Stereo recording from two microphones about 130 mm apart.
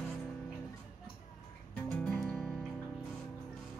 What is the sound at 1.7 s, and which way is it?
Music, 10° left (ahead or behind).